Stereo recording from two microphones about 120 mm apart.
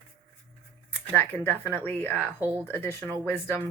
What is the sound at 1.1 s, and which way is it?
A woman's voice, 15° left (ahead or behind).